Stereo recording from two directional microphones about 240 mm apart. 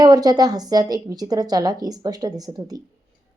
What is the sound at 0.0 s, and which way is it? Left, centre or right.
Speech, centre.